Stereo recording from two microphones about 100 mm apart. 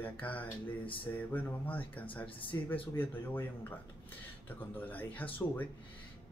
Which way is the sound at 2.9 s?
20° left (ahead or behind).